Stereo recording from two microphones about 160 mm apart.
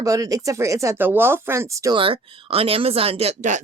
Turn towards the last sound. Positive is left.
turn(degrees=-50)  # may be behind; listen again after turning